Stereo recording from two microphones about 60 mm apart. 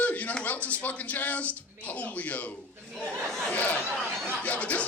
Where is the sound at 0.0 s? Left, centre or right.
Left.